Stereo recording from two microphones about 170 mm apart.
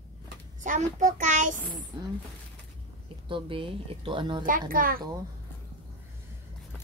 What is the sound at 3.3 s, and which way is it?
Speech, 30° right (ahead or behind).